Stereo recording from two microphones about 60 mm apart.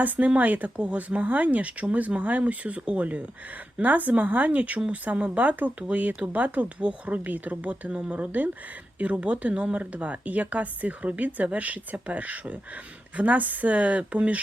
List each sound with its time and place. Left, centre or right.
0.0 s speech: right